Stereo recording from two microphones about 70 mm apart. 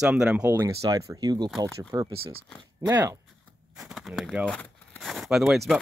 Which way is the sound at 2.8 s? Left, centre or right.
Right.